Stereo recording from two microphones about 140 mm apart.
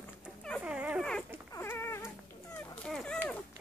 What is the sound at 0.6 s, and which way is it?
Dog, 10° right (ahead or behind).